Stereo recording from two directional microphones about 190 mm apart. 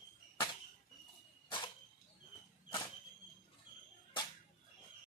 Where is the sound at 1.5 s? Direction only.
25° left (ahead or behind).